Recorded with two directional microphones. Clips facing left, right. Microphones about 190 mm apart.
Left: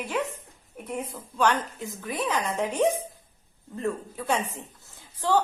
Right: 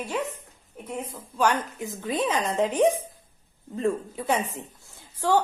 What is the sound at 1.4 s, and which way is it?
A woman's voice, 15° right (ahead or behind).